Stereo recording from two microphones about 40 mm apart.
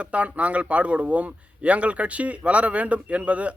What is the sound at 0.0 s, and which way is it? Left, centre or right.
A man's voice, right.